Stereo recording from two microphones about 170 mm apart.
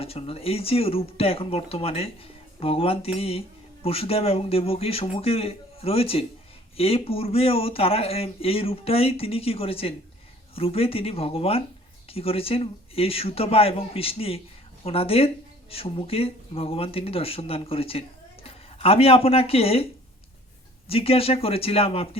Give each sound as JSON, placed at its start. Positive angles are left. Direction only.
{"t": 0.0, "sound": "speech", "side_deg": 35}
{"t": 20.8, "sound": "speech", "side_deg": 35}